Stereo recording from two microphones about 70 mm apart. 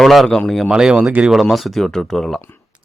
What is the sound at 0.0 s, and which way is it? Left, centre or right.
Speech, centre.